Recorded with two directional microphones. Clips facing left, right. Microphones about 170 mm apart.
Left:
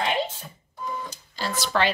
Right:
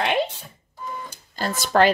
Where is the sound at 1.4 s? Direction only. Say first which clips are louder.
Right 6 dB; 45° right (ahead or behind).